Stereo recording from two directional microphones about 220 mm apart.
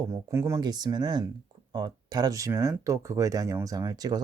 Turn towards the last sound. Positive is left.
turn(degrees=-15)  # may be behind; listen again after turning